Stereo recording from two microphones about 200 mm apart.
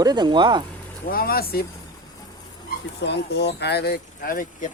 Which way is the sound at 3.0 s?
60° left (ahead or behind).